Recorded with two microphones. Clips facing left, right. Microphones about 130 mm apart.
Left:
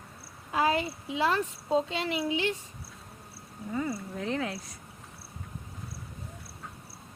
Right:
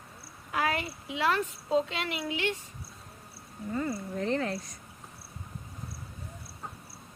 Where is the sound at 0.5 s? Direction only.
25° left (ahead or behind).